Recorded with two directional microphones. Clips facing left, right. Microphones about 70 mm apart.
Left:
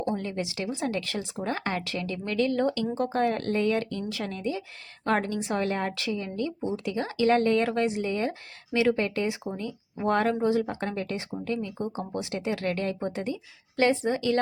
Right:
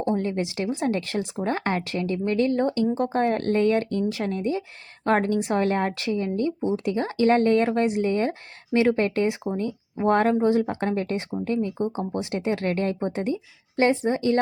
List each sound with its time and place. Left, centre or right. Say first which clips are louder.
0.0 s speech: right 5 dB; right